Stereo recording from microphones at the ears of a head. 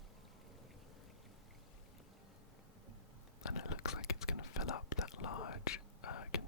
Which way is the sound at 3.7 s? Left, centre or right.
Left.